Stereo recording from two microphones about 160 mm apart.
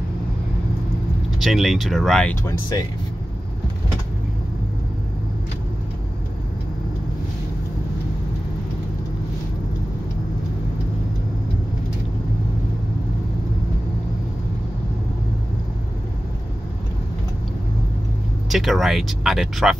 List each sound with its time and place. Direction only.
1.4 s speech: centre (ahead or behind)
2.4 s speech: 20° left (ahead or behind)
18.5 s speech: centre (ahead or behind)